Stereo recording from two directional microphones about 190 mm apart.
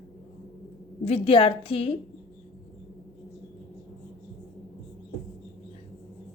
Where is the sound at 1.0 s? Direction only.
30° left (ahead or behind).